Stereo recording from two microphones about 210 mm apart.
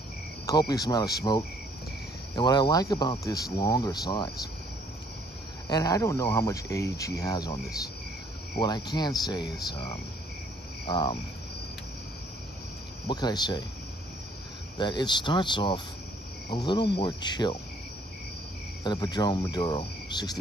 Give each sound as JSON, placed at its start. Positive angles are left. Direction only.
{"t": 0.5, "sound": "speech", "side_deg": 15}
{"t": 5.7, "sound": "speech", "side_deg": 15}
{"t": 8.5, "sound": "cricket", "side_deg": 20}
{"t": 13.0, "sound": "cricket", "side_deg": 20}
{"t": 14.8, "sound": "cricket", "side_deg": 20}
{"t": 18.9, "sound": "cricket", "side_deg": 20}